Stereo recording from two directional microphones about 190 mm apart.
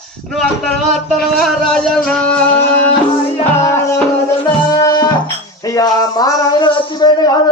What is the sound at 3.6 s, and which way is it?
Music, 15° left (ahead or behind).